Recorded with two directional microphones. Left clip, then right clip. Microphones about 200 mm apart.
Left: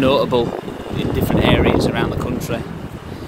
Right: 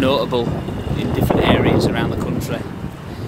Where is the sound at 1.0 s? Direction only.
15° left (ahead or behind).